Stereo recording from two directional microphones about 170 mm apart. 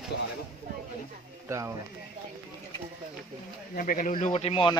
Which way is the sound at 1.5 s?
15° right (ahead or behind).